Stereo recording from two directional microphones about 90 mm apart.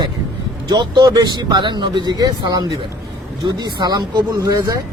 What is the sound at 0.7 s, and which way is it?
A man's voice, 55° right (ahead or behind).